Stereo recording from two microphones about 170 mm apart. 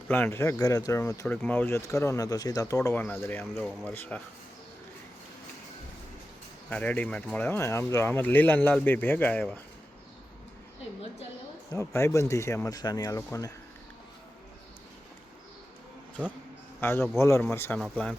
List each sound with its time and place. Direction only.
0.1 s speech: 15° left (ahead or behind)
6.7 s speech: 10° left (ahead or behind)
11.7 s speech: 15° left (ahead or behind)
16.8 s speech: 15° left (ahead or behind)